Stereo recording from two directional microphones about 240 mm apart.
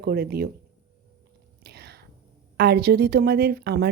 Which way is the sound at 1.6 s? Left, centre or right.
Right.